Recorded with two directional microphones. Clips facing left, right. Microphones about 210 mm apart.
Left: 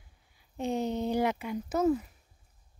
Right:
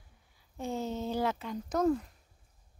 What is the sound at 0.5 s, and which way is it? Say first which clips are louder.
Speech: left 4 dB; 20° left (ahead or behind).